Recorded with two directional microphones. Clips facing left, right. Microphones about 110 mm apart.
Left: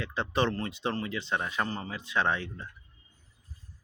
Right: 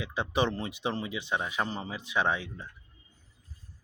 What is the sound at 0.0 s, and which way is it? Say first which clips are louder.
Speech: even; 10° right (ahead or behind).